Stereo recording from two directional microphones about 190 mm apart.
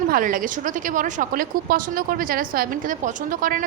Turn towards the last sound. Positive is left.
turn(degrees=-45)  # may be behind; listen again after turning